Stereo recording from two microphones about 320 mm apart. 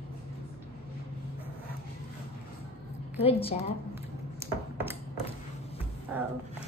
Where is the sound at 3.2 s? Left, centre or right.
Centre.